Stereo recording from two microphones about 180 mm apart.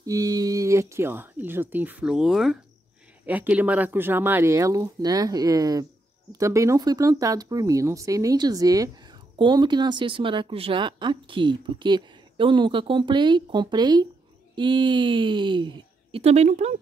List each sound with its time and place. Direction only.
0.0 s a woman's voice: 20° right (ahead or behind); by 16.7 s 35° right (ahead or behind)